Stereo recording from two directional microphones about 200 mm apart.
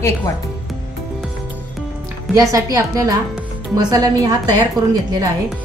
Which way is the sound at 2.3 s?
15° right (ahead or behind).